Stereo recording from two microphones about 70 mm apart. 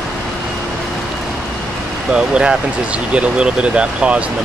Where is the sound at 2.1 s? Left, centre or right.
Centre.